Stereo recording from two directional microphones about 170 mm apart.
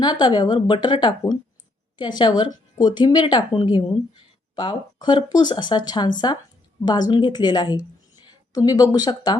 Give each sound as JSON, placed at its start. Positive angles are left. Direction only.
{"t": 0.0, "sound": "speech", "side_deg": 25}